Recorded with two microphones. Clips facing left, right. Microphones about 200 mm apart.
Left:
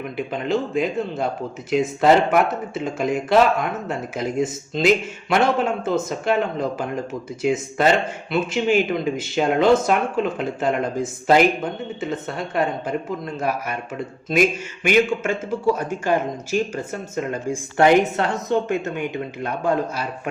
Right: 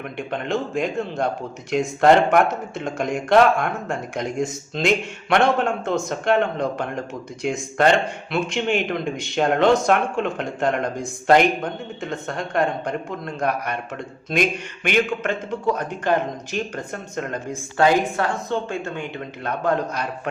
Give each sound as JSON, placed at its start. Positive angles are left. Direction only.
{"t": 0.2, "sound": "speech", "side_deg": 5}
{"t": 17.7, "sound": "speech", "side_deg": 20}